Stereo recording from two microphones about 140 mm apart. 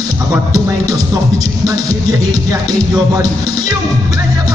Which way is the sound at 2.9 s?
25° right (ahead or behind).